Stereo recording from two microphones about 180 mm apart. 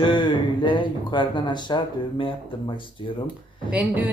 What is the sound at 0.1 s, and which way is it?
Speech, 25° left (ahead or behind).